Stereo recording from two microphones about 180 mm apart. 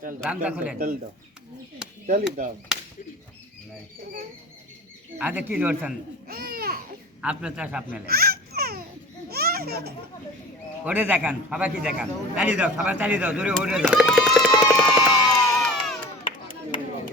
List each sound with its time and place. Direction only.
0.4 s a man's voice: 5° right (ahead or behind)
2.0 s speech: 50° right (ahead or behind)
5.1 s a man's voice: 10° right (ahead or behind)
6.2 s babbling: 55° right (ahead or behind)
7.2 s a man's voice: 5° right (ahead or behind)
8.0 s babbling: 55° right (ahead or behind)
9.3 s a sound: 60° right (ahead or behind)
10.8 s a man's voice: 10° right (ahead or behind)
15.0 s crowd: 20° left (ahead or behind)
15.6 s a sound: 5° left (ahead or behind)